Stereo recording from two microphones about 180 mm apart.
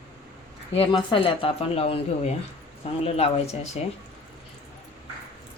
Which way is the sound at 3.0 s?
35° left (ahead or behind).